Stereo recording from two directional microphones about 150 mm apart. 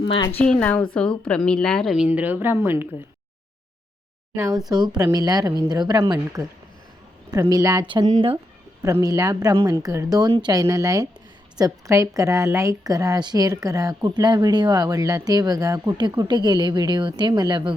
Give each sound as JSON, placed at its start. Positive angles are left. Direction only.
{"t": 0.0, "sound": "a woman's voice", "side_deg": 35}
{"t": 0.3, "sound": "a woman's voice", "side_deg": 5}
{"t": 2.0, "sound": "speech", "side_deg": -10}
{"t": 4.4, "sound": "a woman's voice", "side_deg": -25}